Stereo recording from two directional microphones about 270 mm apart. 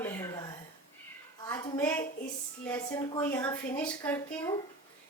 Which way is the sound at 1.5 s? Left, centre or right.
Centre.